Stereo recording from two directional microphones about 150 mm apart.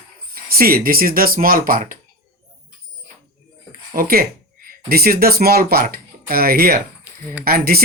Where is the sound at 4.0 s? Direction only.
80° right.